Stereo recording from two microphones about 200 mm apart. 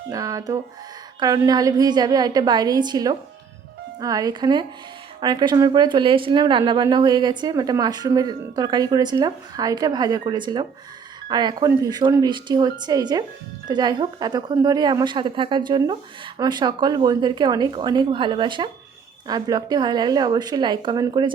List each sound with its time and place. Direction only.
0.1 s a woman's voice: 15° right (ahead or behind)